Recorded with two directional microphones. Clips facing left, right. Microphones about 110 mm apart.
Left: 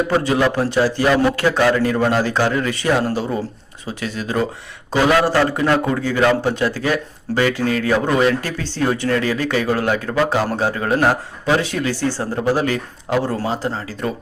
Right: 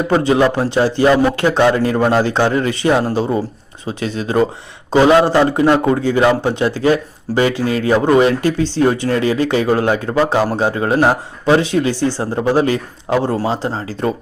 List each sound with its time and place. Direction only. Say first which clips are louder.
0.3 s a man's voice: right 4 dB; 20° right (ahead or behind)